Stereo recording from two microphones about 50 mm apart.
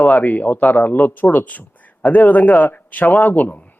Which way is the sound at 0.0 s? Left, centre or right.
Left.